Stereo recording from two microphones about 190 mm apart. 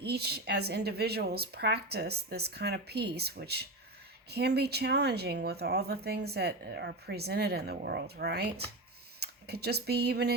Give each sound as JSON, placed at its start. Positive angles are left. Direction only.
{"t": 0.0, "sound": "speech", "side_deg": -60}